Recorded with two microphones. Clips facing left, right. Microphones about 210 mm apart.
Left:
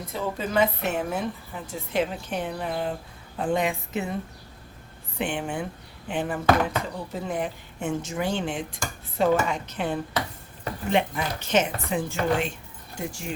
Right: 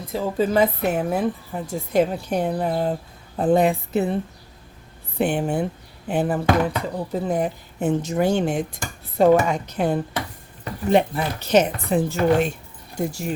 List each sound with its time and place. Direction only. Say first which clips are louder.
0.1 s a woman's voice: right 7 dB; 35° right (ahead or behind)
8.4 s dishes: right 6 dB; 45° right (ahead or behind)
9.5 s a woman's voice: right 6 dB; 40° right (ahead or behind)